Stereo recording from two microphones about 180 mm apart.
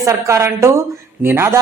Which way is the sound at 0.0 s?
15° right (ahead or behind).